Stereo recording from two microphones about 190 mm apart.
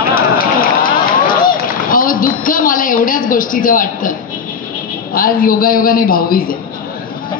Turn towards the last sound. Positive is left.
turn(degrees=50)  # may be behind; listen again after turning